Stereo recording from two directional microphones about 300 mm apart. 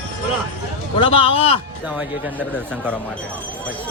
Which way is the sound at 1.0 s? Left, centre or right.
Centre.